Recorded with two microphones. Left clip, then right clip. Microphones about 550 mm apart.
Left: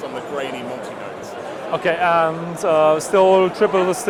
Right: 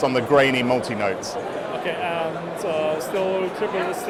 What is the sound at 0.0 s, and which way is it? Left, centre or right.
Speech, right.